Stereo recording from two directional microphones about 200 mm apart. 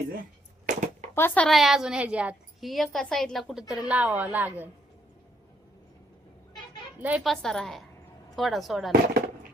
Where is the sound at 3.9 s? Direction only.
5° right (ahead or behind).